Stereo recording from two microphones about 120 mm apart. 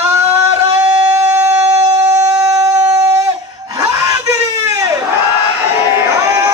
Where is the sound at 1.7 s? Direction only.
25° right (ahead or behind).